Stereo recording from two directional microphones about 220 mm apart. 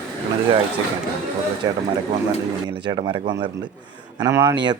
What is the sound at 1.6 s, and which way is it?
Speech, 15° right (ahead or behind).